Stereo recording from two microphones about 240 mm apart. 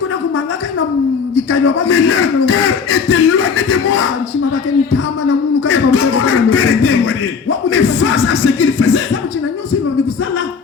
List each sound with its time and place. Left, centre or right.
1.4 s speech: left
5.5 s a sound: left
7.7 s music: left